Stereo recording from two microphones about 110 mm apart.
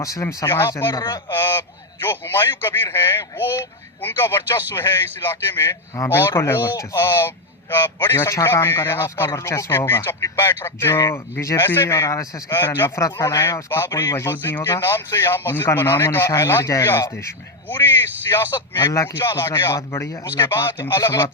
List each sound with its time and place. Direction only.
0.0 s speech: 30° left (ahead or behind)
0.9 s speech: 40° left (ahead or behind)
1.3 s a man's voice: 20° left (ahead or behind)
12.5 s speech: 20° left (ahead or behind)
13.9 s speech: 35° left (ahead or behind)
14.2 s speech: 20° left (ahead or behind)
18.3 s speech: 35° left (ahead or behind)